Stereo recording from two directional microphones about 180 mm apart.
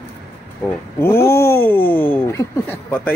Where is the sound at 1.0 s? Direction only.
15° left (ahead or behind).